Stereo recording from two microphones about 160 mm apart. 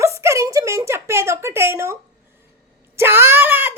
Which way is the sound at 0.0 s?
15° right (ahead or behind).